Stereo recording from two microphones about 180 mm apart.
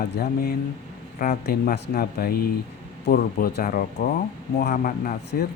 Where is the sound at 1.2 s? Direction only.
50° left (ahead or behind).